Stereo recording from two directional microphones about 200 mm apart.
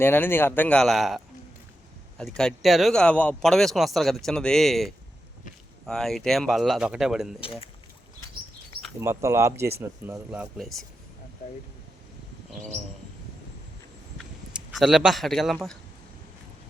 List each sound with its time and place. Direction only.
0.0 s speech: 10° left (ahead or behind)
7.4 s speech: 25° left (ahead or behind)
9.0 s speech: 15° right (ahead or behind); by 10.8 s centre (ahead or behind)
14.2 s a man's voice: centre (ahead or behind)